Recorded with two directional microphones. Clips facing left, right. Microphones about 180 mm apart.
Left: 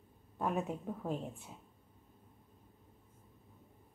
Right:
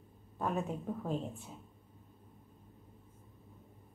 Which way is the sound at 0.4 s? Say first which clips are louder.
Even; 15° left (ahead or behind).